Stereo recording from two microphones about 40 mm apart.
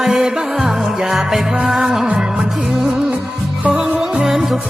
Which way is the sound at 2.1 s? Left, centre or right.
Right.